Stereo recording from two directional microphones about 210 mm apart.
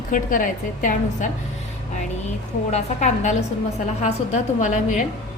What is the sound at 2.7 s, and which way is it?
A woman's voice, 35° left (ahead or behind).